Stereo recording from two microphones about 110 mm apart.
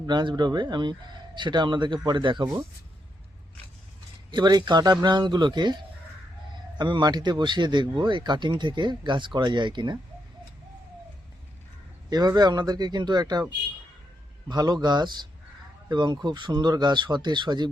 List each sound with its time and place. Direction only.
0.1 s speech: 45° right (ahead or behind)
4.3 s speech: 40° right (ahead or behind)
12.1 s speech: 35° right (ahead or behind)
14.5 s speech: 35° right (ahead or behind)